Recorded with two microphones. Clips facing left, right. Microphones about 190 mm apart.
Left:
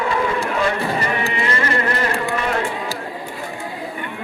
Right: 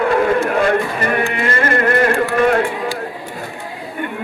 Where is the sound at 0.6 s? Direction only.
50° right (ahead or behind).